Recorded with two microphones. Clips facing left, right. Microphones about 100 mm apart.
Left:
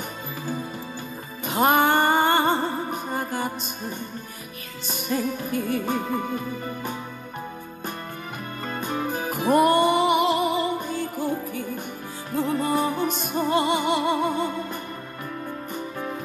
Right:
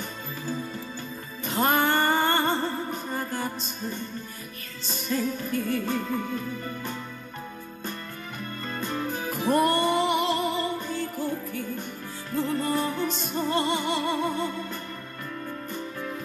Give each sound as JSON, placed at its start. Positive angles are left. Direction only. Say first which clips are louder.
{"t": 1.4, "sound": "music", "louder": "left 4 dB", "side_deg": 15}
{"t": 4.9, "sound": "music", "louder": "left 2 dB", "side_deg": 15}
{"t": 8.7, "sound": "music", "louder": "left 3 dB", "side_deg": 15}